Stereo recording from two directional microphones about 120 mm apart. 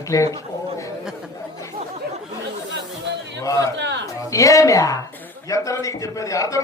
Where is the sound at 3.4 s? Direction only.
30° left (ahead or behind).